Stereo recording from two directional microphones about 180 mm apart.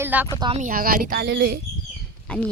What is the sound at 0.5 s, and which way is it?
Speech, 50° right (ahead or behind).